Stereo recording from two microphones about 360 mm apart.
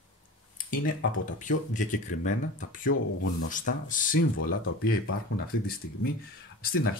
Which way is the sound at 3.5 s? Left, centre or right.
Left.